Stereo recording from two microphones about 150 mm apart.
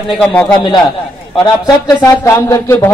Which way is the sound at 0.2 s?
10° left (ahead or behind).